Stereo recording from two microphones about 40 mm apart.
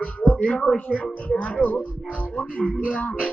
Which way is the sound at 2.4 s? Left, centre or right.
Left.